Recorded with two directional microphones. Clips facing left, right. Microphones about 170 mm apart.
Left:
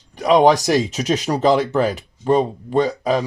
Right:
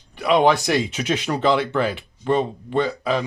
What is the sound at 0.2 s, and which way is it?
Speech, 40° left (ahead or behind).